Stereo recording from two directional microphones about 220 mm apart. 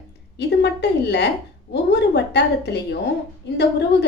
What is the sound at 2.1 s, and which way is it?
Speech, 50° left (ahead or behind).